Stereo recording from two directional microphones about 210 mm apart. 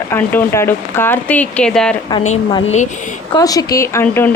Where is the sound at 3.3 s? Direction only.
15° left (ahead or behind).